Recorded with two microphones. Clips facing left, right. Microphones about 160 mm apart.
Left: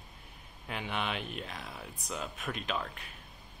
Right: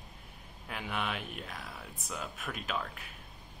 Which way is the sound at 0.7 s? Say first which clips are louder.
Left 1 dB; centre (ahead or behind).